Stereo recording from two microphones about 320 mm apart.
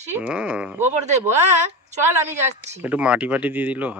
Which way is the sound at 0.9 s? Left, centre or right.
Right.